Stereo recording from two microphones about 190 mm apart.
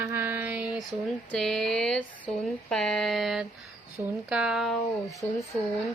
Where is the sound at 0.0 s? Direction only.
10° right (ahead or behind).